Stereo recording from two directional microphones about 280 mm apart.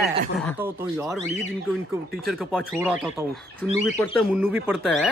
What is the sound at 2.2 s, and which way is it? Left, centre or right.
Speech, centre.